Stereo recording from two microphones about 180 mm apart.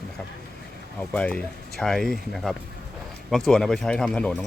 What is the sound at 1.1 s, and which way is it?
Speech, 5° left (ahead or behind).